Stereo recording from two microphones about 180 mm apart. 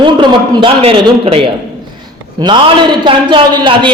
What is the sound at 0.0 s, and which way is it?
A man's voice, 25° right (ahead or behind).